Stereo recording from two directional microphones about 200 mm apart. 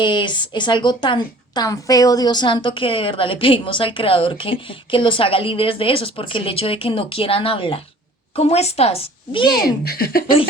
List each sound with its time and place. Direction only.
0.0 s a woman's voice: 25° left (ahead or behind)
9.6 s speech: 50° left (ahead or behind)